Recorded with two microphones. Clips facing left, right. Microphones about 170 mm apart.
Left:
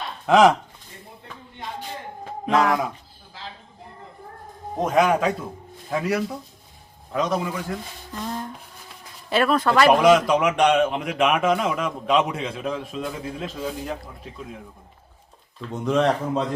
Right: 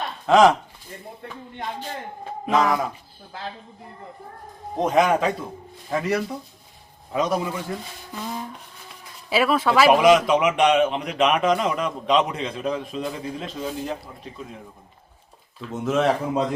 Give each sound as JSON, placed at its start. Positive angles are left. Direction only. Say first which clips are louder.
{"t": 0.3, "sound": "speech", "louder": "even", "side_deg": 5}
{"t": 2.5, "sound": "a man's voice", "louder": "even", "side_deg": 0}
{"t": 3.3, "sound": "a sound", "louder": "right 5 dB", "side_deg": -55}
{"t": 4.8, "sound": "a man's voice", "louder": "even", "side_deg": 0}
{"t": 15.6, "sound": "a man's voice", "louder": "even", "side_deg": -5}